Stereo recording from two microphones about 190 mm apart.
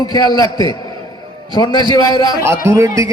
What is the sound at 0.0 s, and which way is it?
A man's voice, 20° left (ahead or behind).